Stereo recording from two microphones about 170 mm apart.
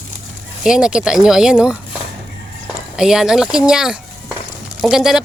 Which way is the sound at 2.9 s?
5° right (ahead or behind).